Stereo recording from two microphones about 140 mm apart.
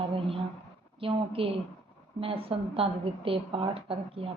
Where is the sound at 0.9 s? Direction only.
40° right (ahead or behind).